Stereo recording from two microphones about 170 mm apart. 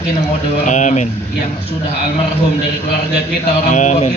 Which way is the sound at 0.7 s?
45° left (ahead or behind).